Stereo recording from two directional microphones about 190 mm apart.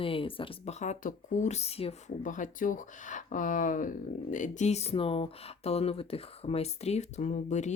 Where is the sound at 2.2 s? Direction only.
45° left (ahead or behind).